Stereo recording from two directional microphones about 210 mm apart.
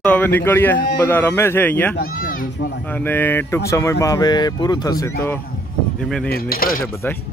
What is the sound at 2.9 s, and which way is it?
Speech, 10° left (ahead or behind).